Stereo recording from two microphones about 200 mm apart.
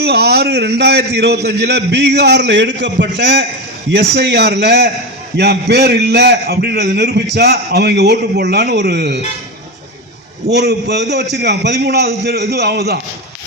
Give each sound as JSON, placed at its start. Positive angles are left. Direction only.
{"t": 0.0, "sound": "a man's voice", "side_deg": -55}
{"t": 10.5, "sound": "a man's voice", "side_deg": -55}